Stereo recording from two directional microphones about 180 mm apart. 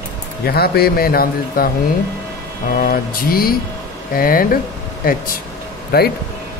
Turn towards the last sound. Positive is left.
turn(degrees=60)  # may be behind; listen again after turning